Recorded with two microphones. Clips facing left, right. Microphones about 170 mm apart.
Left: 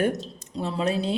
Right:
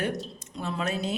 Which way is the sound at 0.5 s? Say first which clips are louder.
Left 5 dB; 30° left (ahead or behind).